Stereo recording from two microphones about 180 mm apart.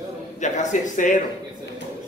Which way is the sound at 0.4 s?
40° left (ahead or behind).